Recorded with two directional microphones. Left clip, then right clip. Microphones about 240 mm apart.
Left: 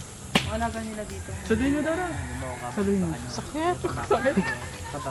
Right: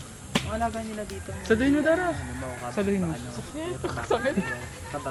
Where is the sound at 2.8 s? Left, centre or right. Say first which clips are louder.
Right 1 dB; right.